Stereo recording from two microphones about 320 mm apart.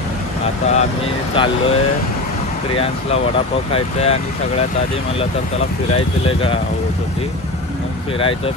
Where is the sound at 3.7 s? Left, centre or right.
Centre.